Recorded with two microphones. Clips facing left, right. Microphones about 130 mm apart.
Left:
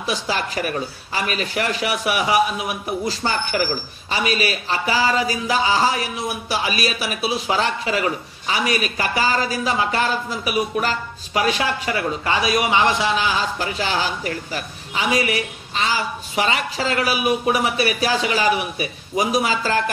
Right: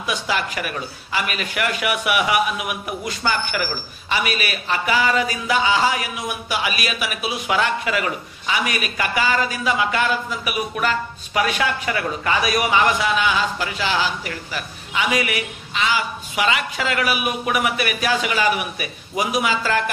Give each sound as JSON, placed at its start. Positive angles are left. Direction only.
{"t": 0.0, "sound": "speech", "side_deg": 35}